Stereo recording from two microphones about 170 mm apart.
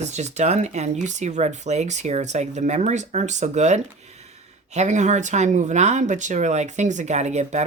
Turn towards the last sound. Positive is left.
turn(degrees=-40)  # may be behind; listen again after turning